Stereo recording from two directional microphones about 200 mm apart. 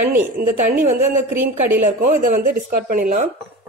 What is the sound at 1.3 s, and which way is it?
Speech, 10° right (ahead or behind).